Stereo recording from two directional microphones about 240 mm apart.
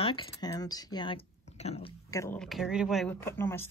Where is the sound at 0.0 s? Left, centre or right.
Left.